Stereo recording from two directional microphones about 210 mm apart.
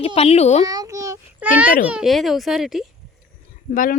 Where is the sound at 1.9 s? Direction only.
Centre (ahead or behind).